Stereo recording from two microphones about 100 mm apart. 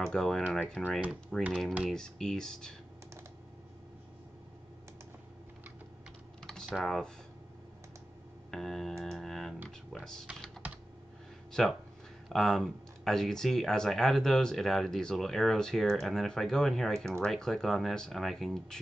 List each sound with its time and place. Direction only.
0.0 s speech: 5° left (ahead or behind)
0.6 s speech: 15° left (ahead or behind)
1.3 s speech: 5° left (ahead or behind)
6.4 s typing: 5° left (ahead or behind)
8.5 s music: 5° left (ahead or behind)
11.6 s speech: 5° left (ahead or behind)